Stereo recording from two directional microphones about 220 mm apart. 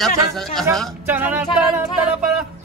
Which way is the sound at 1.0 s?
10° right (ahead or behind).